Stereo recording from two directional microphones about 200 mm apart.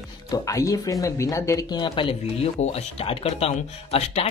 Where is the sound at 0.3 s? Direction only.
15° left (ahead or behind).